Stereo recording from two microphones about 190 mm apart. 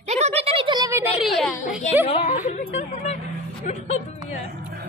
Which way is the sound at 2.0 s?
35° left (ahead or behind).